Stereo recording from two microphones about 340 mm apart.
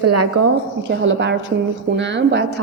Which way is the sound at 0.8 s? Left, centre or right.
Right.